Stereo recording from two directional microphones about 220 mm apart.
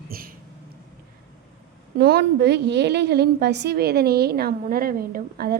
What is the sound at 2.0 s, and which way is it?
A woman's voice, 45° right (ahead or behind).